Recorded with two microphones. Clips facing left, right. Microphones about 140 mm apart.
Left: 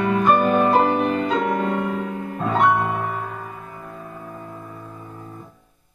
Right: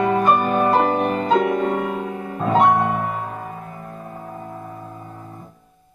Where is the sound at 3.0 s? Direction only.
40° right (ahead or behind).